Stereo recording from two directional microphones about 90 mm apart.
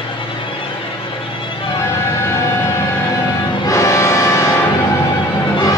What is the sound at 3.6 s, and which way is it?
Music, 35° left (ahead or behind).